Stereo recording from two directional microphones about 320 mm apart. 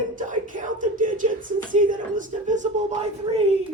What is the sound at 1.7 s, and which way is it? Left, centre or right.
A man's voice, right.